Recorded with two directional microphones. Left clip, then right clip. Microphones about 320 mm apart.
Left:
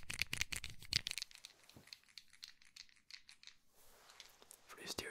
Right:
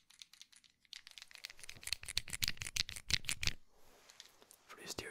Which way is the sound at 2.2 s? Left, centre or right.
Right.